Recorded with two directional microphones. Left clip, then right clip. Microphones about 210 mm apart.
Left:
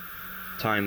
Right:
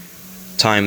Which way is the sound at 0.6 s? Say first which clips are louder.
Right 10 dB; 35° right (ahead or behind).